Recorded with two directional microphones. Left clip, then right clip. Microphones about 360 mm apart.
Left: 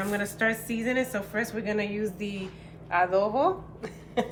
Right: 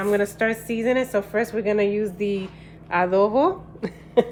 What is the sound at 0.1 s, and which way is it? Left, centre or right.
A woman's voice, centre.